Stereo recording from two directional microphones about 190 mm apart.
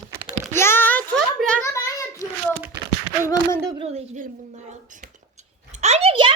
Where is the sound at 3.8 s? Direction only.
35° right (ahead or behind).